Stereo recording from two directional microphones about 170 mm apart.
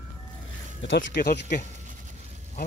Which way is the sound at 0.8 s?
90° left.